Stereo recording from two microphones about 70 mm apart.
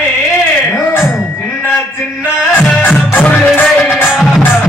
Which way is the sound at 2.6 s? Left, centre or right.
Left.